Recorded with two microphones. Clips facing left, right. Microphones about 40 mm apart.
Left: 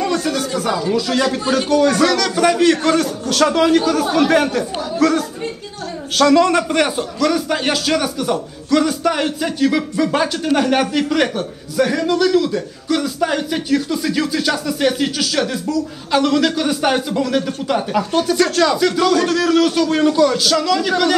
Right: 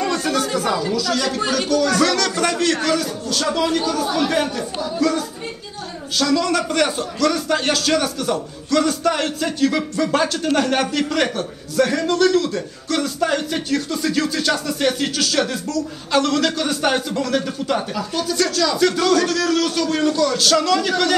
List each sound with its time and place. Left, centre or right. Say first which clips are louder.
0.7 s speech: left 3 dB; left
2.0 s a man's voice: left 3 dB; centre
2.8 s a man's voice: left 4 dB; left
6.2 s speech: left 7 dB; left
6.7 s a man's voice: left 2 dB; centre
17.9 s speech: left 6 dB; left
18.8 s a man's voice: left 1 dB; centre
20.3 s a man's voice: left 1 dB; centre